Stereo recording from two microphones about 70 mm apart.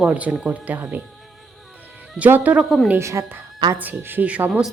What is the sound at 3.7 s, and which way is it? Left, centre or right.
Speech, right.